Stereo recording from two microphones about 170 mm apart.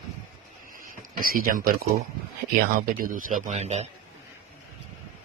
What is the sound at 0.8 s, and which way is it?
Speech, 55° right (ahead or behind).